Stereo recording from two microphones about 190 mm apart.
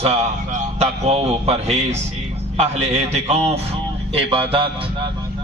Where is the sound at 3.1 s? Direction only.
35° right (ahead or behind).